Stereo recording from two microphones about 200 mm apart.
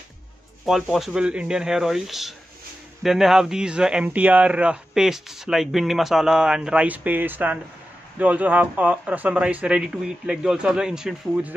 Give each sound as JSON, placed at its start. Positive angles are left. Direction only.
{"t": 0.8, "sound": "speech", "side_deg": 0}